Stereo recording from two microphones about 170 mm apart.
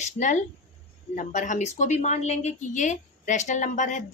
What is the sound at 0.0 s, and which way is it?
A woman's voice, 45° left (ahead or behind).